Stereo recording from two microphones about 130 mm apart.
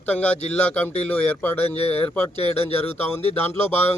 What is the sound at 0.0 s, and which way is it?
Speech, 10° left (ahead or behind).